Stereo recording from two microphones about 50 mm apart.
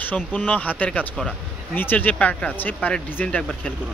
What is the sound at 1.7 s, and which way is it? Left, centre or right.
Speech, left.